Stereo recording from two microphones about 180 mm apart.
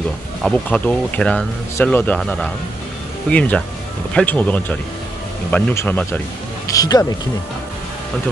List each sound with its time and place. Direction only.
0.4 s speech: 5° left (ahead or behind)
6.7 s speech: 20° left (ahead or behind)